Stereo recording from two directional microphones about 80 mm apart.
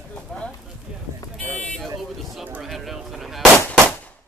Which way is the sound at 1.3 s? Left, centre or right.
Centre.